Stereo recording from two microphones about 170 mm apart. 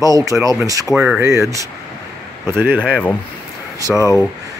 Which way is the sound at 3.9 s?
15° left (ahead or behind).